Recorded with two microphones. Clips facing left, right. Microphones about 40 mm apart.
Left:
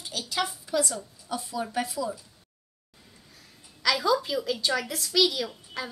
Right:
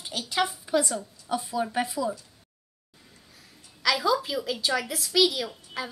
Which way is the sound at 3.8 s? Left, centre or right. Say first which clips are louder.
Even; centre.